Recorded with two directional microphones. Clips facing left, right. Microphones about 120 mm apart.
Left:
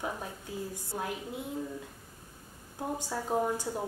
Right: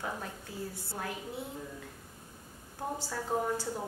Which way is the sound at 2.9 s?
15° left (ahead or behind).